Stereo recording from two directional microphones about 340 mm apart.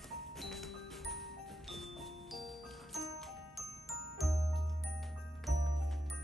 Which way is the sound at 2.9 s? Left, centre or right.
Centre.